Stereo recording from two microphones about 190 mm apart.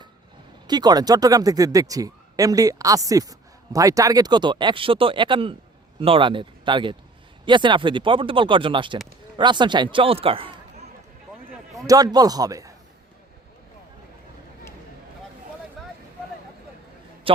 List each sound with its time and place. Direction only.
0.7 s a man's voice: 20° right (ahead or behind)
11.9 s speech: 20° right (ahead or behind)
15.8 s vehicle: centre (ahead or behind)
17.3 s a man's voice: 30° right (ahead or behind)